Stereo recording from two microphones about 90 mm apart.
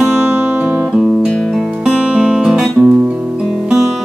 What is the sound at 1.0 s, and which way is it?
Music, 5° right (ahead or behind).